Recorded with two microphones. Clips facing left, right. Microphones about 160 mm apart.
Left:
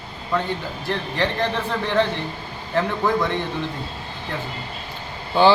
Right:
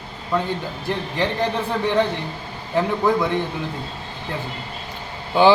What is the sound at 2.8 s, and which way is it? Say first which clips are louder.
Speech: right 2 dB; 10° right (ahead or behind).